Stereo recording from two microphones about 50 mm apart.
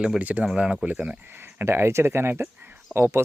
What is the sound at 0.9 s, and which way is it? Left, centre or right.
Speech, right.